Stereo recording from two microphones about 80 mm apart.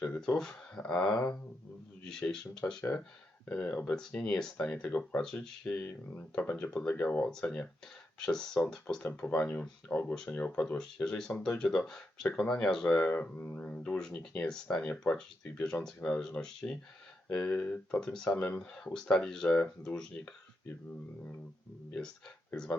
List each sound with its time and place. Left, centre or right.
0.0 s a sound: centre
0.3 s speech: centre
7.3 s speech: centre
9.0 s speech: left
18.4 s speech: centre
18.9 s speech: centre